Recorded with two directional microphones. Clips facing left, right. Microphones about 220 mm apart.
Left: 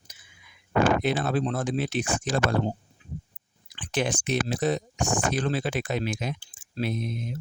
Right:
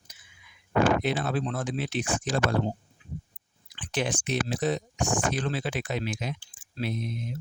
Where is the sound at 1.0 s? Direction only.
45° left (ahead or behind).